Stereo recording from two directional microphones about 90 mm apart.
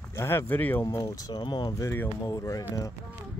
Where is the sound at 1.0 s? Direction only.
45° left (ahead or behind).